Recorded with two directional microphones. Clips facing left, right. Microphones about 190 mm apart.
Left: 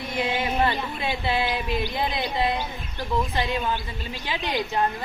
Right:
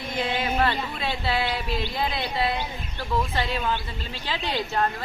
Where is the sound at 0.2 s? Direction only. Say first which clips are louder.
Left 1 dB; 15° left (ahead or behind).